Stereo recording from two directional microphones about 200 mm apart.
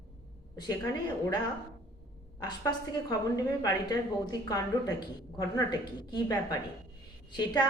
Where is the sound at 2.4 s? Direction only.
20° left (ahead or behind).